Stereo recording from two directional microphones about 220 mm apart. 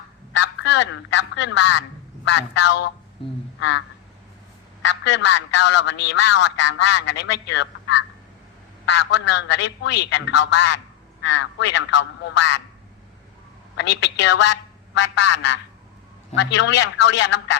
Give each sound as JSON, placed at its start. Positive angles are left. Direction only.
{"t": 0.3, "sound": "a man's voice", "side_deg": 55}
{"t": 4.8, "sound": "a man's voice", "side_deg": 55}
{"t": 13.7, "sound": "a man's voice", "side_deg": 55}